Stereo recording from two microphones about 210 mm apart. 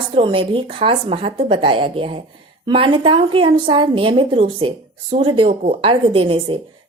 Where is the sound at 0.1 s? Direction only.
25° right (ahead or behind).